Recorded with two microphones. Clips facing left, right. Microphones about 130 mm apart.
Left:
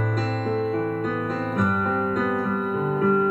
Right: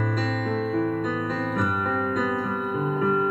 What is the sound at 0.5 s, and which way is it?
Music, 45° left (ahead or behind).